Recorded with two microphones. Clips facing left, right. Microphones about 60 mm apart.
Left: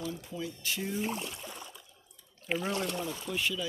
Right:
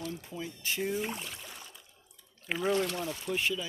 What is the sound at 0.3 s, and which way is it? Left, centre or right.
Speech, right.